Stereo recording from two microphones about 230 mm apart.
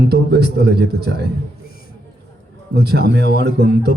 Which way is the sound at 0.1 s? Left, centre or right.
Right.